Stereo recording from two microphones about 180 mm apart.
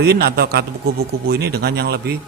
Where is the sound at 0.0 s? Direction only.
60° right (ahead or behind).